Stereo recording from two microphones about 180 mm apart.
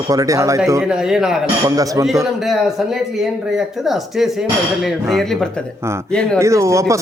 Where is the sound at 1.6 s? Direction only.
20° right (ahead or behind).